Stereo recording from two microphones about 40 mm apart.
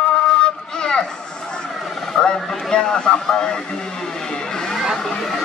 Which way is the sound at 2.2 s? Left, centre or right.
Centre.